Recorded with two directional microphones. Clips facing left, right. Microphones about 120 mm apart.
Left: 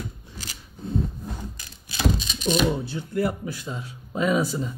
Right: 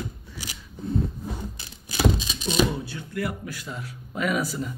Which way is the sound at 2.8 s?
25° left (ahead or behind).